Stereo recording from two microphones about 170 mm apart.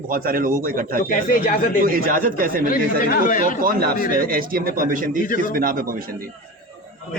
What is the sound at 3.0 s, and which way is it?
Speech, 55° left (ahead or behind).